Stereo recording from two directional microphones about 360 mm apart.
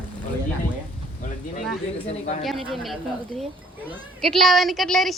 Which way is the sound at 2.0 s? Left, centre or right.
Centre.